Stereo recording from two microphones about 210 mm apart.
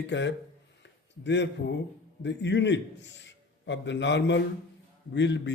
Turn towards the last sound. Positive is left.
turn(degrees=60)  # may be behind; listen again after turning